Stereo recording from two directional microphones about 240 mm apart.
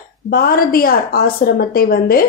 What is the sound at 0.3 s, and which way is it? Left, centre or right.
A woman's voice, left.